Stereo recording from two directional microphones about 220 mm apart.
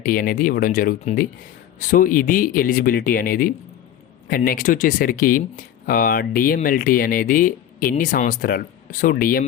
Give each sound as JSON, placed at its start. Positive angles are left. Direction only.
{"t": 0.0, "sound": "speech", "side_deg": 40}